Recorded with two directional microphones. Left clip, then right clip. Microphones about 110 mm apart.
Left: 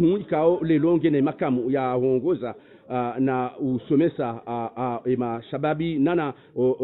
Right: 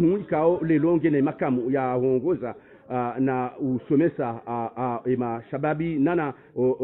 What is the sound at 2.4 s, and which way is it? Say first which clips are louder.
Speech: left 1 dB; 10° left (ahead or behind).